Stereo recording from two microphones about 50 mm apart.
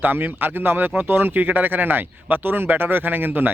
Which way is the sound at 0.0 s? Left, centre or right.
Right.